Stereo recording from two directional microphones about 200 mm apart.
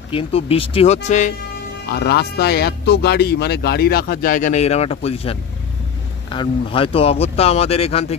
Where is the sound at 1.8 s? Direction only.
55° left (ahead or behind).